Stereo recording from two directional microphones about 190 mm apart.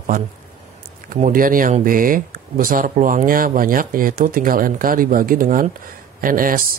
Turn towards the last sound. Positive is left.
turn(degrees=-45)  # may be behind; listen again after turning